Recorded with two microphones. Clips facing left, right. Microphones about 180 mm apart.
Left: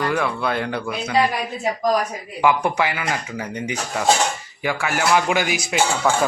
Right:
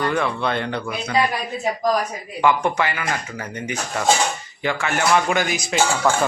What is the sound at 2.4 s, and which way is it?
Speech, 10° left (ahead or behind).